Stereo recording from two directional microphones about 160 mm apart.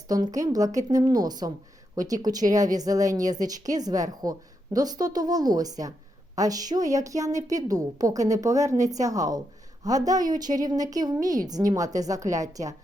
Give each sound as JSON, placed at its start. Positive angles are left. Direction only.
{"t": 0.3, "sound": "a woman's voice", "side_deg": -20}